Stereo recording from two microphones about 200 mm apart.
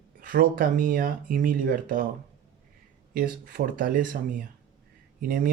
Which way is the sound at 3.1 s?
45° right (ahead or behind).